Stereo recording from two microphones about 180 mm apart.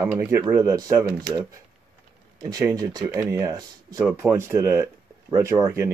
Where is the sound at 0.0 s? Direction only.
10° right (ahead or behind).